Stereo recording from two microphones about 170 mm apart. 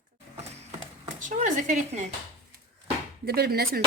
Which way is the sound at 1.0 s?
50° right (ahead or behind).